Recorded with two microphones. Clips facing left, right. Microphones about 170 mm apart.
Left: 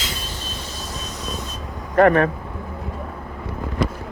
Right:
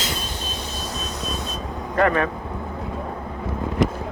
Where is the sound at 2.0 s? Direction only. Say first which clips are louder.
Left 5 dB; 55° left (ahead or behind).